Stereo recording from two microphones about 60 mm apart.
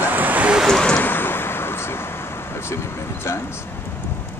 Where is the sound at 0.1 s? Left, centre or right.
Right.